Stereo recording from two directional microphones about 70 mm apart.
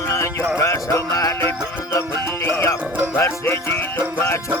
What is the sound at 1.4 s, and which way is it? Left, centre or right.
Music, left.